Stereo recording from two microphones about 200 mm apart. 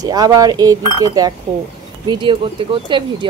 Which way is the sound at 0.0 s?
20° right (ahead or behind).